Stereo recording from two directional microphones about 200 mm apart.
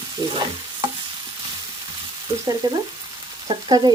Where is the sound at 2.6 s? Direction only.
20° right (ahead or behind).